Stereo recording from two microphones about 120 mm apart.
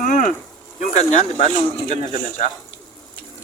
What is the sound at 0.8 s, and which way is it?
Speech, 75° left (ahead or behind).